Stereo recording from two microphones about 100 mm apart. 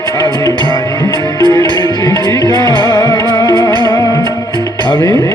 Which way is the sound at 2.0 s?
40° left (ahead or behind).